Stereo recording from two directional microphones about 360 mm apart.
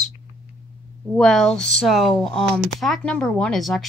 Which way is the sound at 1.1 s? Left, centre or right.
Centre.